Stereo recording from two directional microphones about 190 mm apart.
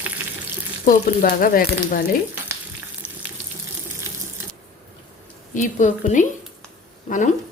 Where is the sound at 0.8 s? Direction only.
45° left (ahead or behind).